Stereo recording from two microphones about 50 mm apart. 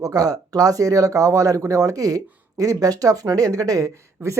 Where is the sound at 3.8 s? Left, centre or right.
Right.